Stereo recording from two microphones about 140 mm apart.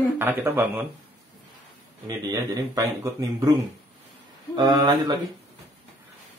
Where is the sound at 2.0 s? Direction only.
25° right (ahead or behind).